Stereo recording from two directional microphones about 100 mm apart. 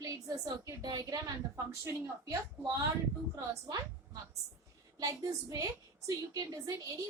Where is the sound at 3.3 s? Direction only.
45° right (ahead or behind).